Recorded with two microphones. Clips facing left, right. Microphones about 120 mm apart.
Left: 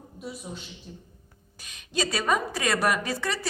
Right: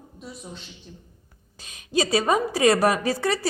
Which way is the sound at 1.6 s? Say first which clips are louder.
Right 5 dB; 30° right (ahead or behind).